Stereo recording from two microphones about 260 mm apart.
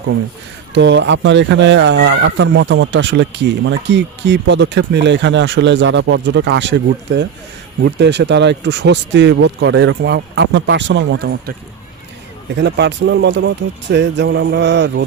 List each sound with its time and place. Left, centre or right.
0.7 s speech: right
12.5 s speech: right